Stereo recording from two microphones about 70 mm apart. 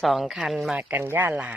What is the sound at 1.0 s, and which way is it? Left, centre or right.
Speech, right.